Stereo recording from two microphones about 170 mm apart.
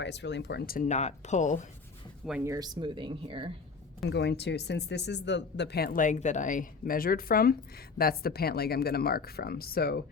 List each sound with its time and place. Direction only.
0.0 s speech: 90° left; by 0.9 s 60° left (ahead or behind)
0.9 s speech: 40° left (ahead or behind)
2.4 s speech: 20° right (ahead or behind)
4.1 s speech: 85° left; by 10.0 s 65° left (ahead or behind)